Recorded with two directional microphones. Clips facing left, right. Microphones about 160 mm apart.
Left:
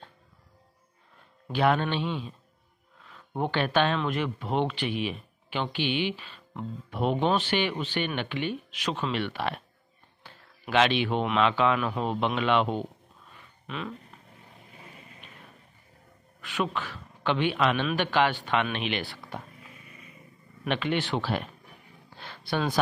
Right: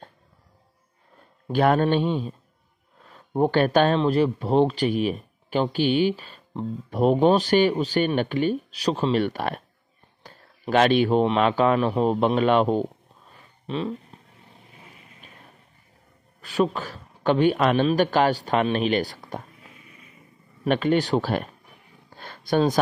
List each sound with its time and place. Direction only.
1.5 s a man's voice: 45° right (ahead or behind)
16.3 s speech: 35° right (ahead or behind)
20.6 s a man's voice: 45° right (ahead or behind)
22.1 s a sound: 45° right (ahead or behind)